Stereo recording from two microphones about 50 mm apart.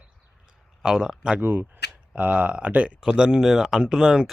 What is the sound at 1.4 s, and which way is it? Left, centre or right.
Speech, right.